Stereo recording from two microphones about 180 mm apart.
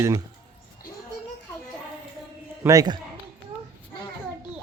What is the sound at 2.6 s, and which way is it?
Speech, 20° right (ahead or behind).